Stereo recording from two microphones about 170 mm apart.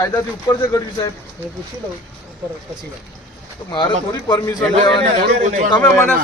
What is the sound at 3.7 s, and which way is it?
Speech, 25° left (ahead or behind).